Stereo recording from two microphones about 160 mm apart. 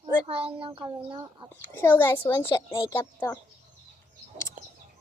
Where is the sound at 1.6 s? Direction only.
15° left (ahead or behind).